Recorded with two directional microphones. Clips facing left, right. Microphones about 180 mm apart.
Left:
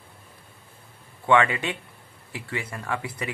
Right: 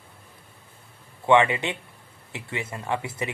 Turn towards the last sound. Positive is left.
turn(degrees=-25)  # may be behind; listen again after turning